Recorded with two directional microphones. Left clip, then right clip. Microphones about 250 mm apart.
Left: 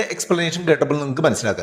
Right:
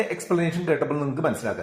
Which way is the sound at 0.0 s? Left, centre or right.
Left.